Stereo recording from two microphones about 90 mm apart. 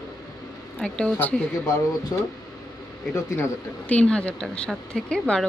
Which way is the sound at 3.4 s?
15° left (ahead or behind).